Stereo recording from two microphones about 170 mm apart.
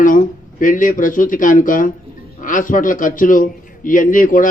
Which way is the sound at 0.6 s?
50° left (ahead or behind).